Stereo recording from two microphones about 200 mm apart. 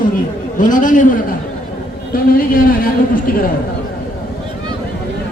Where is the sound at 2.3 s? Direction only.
45° left (ahead or behind).